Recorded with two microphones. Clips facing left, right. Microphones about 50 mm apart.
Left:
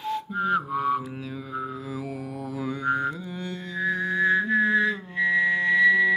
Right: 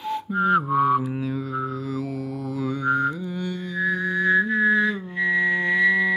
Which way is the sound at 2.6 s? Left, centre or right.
Centre.